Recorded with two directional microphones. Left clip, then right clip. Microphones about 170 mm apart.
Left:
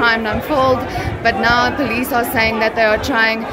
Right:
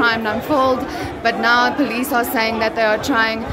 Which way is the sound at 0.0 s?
5° right (ahead or behind).